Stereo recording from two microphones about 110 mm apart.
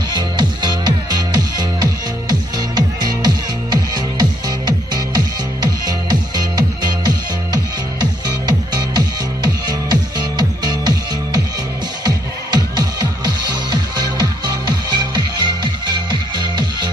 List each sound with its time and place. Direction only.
0.1 s music: 40° right (ahead or behind)
8.4 s music: 40° right (ahead or behind)
12.0 s music: 35° right (ahead or behind)